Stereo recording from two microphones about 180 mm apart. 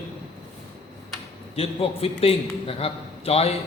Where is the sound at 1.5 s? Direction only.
35° left (ahead or behind).